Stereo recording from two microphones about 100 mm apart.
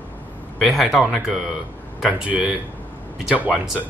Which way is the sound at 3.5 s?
5° right (ahead or behind).